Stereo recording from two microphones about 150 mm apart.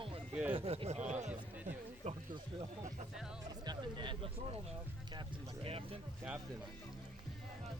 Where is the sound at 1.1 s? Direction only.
50° right (ahead or behind).